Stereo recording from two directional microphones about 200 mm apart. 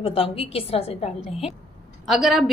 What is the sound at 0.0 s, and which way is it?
A woman's voice, 30° left (ahead or behind).